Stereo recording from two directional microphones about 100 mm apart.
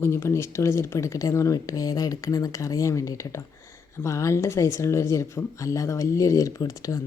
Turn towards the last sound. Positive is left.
turn(degrees=35)  # may be behind; listen again after turning